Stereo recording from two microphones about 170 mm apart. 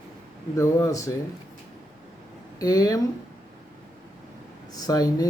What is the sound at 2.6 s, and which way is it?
Speech, 20° left (ahead or behind).